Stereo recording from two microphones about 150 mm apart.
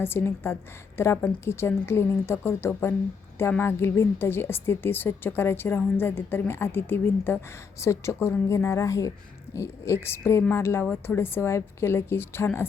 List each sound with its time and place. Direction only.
0.0 s a woman's voice: 15° left (ahead or behind)